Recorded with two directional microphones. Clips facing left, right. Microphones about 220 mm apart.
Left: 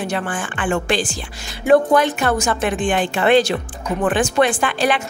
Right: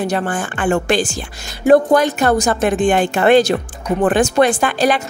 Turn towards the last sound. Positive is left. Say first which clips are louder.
# right 3 dB
turn(degrees=-40)  # may be behind; listen again after turning